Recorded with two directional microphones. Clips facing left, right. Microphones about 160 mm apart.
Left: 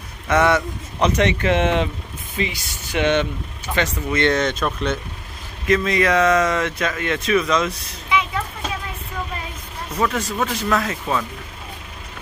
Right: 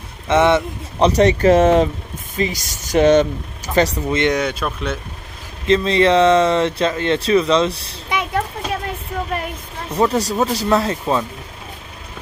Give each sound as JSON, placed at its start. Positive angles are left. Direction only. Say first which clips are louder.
{"t": 0.3, "sound": "speech", "louder": "right 3 dB", "side_deg": -25}
{"t": 4.1, "sound": "speech", "louder": "right 1 dB", "side_deg": -15}
{"t": 5.7, "sound": "speech", "louder": "right 4 dB", "side_deg": -30}
{"t": 8.2, "sound": "a sound", "louder": "right 4 dB", "side_deg": -60}
{"t": 9.9, "sound": "speech", "louder": "right 5 dB", "side_deg": -35}